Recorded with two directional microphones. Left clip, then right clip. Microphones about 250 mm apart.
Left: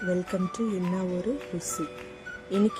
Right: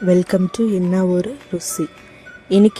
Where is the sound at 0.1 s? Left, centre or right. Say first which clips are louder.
Right 15 dB; right.